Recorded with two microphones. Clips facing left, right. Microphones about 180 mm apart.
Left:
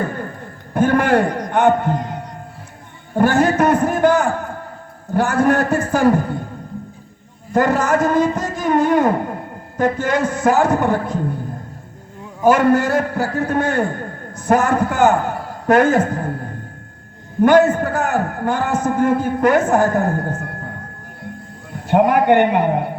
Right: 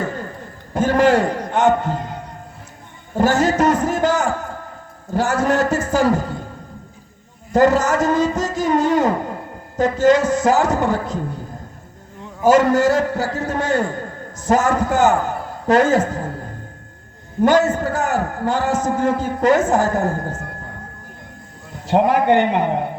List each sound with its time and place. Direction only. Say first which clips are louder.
0.7 s a sound: even; 55° left (ahead or behind)
3.2 s a man's voice: left 1 dB; 55° left (ahead or behind)
7.5 s a man's voice: right 1 dB; 55° left (ahead or behind)
12.5 s a man's voice: even; 55° left (ahead or behind)
17.4 s a man's voice: left 3 dB; 55° left (ahead or behind)
21.8 s a man's voice: left 2 dB; 55° left (ahead or behind)